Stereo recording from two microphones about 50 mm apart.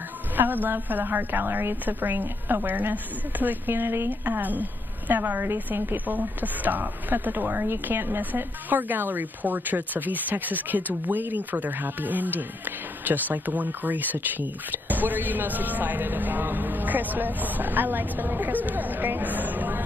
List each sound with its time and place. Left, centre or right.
0.4 s speech: right
4.1 s speech: right
6.0 s speech: right